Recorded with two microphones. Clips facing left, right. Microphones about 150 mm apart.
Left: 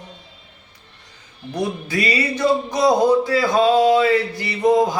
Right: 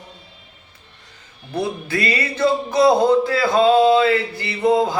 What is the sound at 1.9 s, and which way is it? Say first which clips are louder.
Music: left 1 dB; 15° left (ahead or behind).